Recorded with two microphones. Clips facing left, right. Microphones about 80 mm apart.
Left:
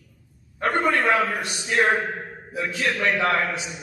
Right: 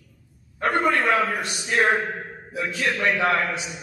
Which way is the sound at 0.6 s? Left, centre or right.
Centre.